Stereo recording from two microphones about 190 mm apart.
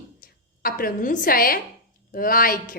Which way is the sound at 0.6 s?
50° left (ahead or behind).